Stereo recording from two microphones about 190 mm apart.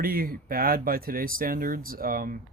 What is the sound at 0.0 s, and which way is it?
Speech, 50° right (ahead or behind).